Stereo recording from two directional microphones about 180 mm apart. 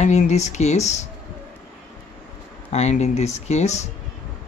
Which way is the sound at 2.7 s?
40° left (ahead or behind).